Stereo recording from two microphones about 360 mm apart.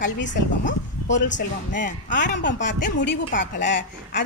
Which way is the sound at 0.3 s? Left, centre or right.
Left.